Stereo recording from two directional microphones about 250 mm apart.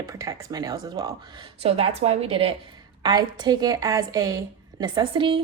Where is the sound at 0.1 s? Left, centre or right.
Centre.